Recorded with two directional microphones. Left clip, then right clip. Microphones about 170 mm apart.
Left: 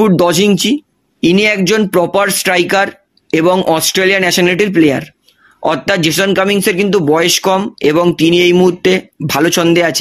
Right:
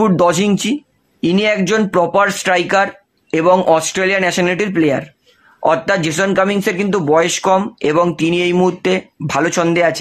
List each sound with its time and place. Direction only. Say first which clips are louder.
0.0 s speech: left 3 dB; 25° left (ahead or behind)